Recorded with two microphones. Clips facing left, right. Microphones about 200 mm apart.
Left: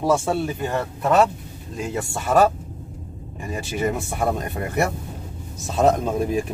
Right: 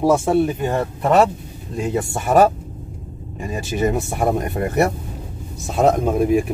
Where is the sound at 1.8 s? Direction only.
20° right (ahead or behind).